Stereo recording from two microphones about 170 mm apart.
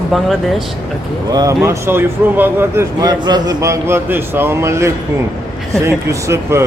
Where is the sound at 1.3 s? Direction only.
25° right (ahead or behind).